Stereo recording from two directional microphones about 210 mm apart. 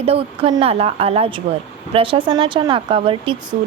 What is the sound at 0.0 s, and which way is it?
A woman's voice, 25° right (ahead or behind).